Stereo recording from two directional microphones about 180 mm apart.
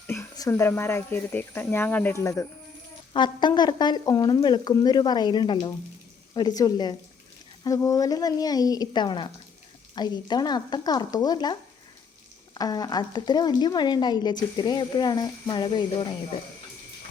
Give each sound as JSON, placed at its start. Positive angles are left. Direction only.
{"t": 0.1, "sound": "speech", "side_deg": 15}
{"t": 12.5, "sound": "speech", "side_deg": 20}